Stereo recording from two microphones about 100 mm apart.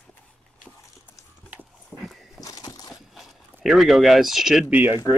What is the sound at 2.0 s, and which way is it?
Horse, centre (ahead or behind).